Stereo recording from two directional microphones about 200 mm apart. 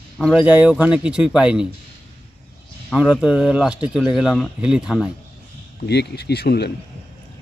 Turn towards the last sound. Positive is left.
turn(degrees=55)  # may be behind; listen again after turning